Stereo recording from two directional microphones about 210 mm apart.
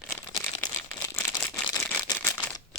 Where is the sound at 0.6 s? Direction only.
10° left (ahead or behind).